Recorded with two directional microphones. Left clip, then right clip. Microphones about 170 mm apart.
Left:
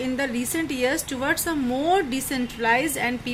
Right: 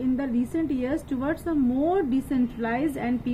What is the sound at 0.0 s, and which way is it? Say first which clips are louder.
Speech: left 1 dB; 40° right (ahead or behind).